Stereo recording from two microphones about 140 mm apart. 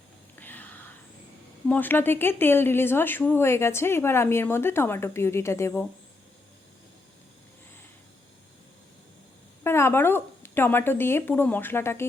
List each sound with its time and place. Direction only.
0.3 s whispering: 15° left (ahead or behind)
1.6 s speech: 10° left (ahead or behind)
9.6 s speech: 15° left (ahead or behind)